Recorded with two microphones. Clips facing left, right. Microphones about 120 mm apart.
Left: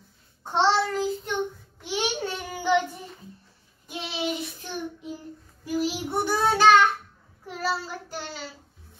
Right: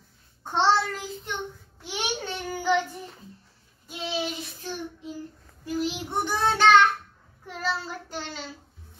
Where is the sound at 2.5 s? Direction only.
15° left (ahead or behind).